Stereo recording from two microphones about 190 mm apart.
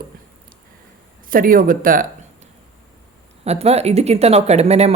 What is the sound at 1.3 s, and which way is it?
Speech, 50° right (ahead or behind).